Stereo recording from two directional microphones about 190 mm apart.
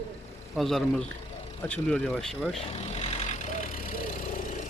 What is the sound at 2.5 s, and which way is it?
Vehicle, 35° left (ahead or behind).